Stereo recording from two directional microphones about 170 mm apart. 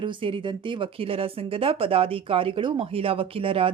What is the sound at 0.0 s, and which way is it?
A woman's voice, 30° right (ahead or behind).